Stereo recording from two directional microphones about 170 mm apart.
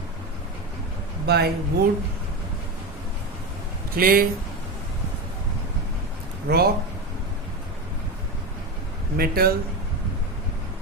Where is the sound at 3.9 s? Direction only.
60° right (ahead or behind).